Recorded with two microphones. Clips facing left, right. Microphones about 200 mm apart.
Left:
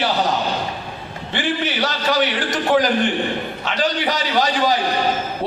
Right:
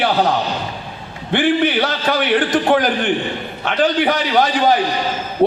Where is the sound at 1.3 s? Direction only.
55° right (ahead or behind).